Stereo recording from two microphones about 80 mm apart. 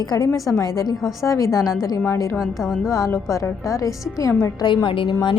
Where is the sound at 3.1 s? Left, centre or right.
Left.